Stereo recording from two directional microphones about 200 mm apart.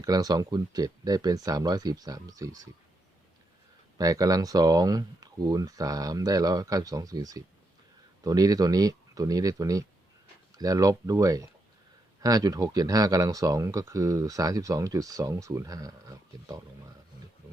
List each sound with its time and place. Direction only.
0.0 s speech: 20° right (ahead or behind)
3.9 s speech: 15° right (ahead or behind)